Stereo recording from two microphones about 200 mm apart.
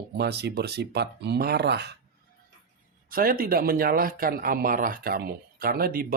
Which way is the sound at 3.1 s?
45° right (ahead or behind).